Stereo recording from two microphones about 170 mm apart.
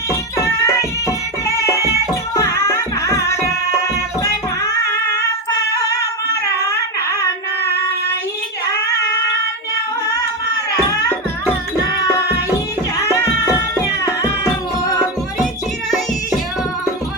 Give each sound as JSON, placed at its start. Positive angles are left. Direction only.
{"t": 0.1, "sound": "music", "side_deg": 15}
{"t": 6.6, "sound": "a sound", "side_deg": 20}
{"t": 13.8, "sound": "music", "side_deg": 20}